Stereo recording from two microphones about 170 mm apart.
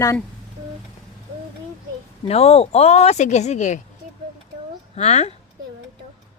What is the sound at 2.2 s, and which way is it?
Speech, 35° left (ahead or behind).